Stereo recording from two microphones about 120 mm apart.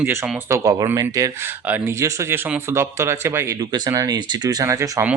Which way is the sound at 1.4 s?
15° right (ahead or behind).